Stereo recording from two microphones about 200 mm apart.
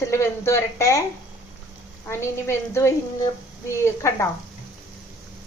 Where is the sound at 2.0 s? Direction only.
15° left (ahead or behind).